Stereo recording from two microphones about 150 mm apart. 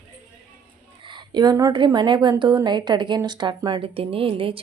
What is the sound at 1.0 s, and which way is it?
A woman's voice, 30° right (ahead or behind).